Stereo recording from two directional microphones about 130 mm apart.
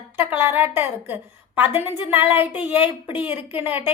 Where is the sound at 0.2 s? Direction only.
15° right (ahead or behind).